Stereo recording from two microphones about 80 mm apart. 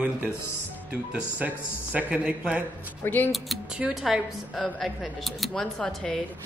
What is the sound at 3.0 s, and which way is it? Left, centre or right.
Speech, left.